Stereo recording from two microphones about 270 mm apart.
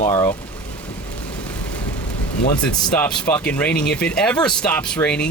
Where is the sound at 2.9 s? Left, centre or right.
Centre.